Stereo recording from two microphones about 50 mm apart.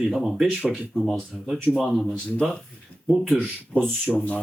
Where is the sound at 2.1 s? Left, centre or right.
Left.